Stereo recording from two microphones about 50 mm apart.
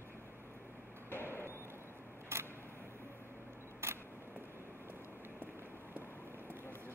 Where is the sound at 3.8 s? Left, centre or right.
Right.